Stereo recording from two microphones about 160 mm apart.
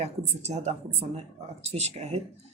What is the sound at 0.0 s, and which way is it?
A woman's voice, 45° right (ahead or behind).